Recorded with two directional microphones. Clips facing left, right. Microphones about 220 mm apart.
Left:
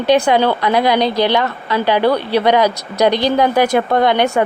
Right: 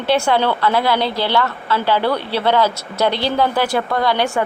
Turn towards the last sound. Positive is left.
turn(degrees=20)  # may be behind; listen again after turning